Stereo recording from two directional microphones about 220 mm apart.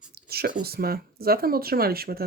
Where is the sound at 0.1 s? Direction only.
45° right (ahead or behind).